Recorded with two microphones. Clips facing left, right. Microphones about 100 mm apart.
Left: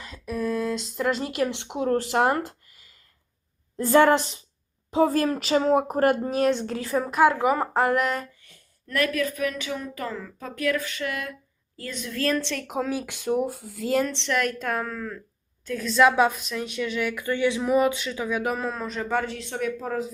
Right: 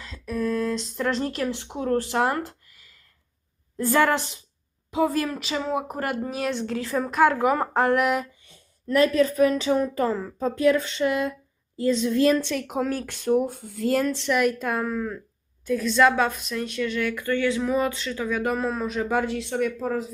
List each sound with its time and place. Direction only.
0.0 s a woman's voice: 10° left (ahead or behind)
4.9 s a woman's voice: 30° left (ahead or behind)
6.5 s a woman's voice: 20° left (ahead or behind)
7.0 s speech: 5° left (ahead or behind)
8.4 s a woman's voice: 20° right (ahead or behind)
12.5 s speech: centre (ahead or behind)